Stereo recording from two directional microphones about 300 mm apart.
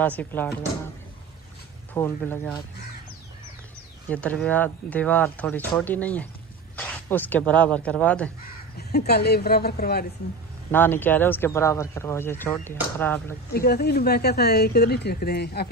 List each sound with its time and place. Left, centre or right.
0.0 s speech: centre
2.0 s speech: centre
4.1 s speech: centre
8.7 s speech: left
10.7 s speech: centre
13.5 s speech: left